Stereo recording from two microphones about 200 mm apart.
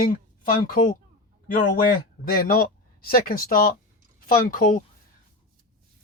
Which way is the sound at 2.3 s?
45° left (ahead or behind).